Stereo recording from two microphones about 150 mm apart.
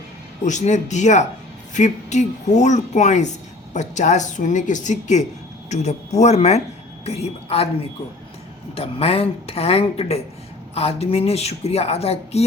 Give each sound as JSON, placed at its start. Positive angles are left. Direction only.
{"t": 0.4, "sound": "a woman's voice", "side_deg": 55}
{"t": 8.7, "sound": "speech", "side_deg": 40}